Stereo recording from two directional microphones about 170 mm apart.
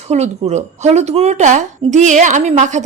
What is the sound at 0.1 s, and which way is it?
A woman's voice, 40° right (ahead or behind).